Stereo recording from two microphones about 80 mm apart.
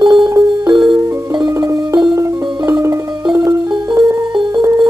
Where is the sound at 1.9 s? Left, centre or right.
Right.